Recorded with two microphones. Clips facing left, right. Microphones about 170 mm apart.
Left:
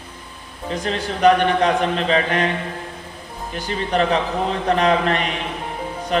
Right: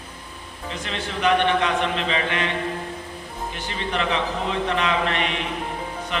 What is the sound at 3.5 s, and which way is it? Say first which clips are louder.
A man's voice: left 7 dB; 40° left (ahead or behind).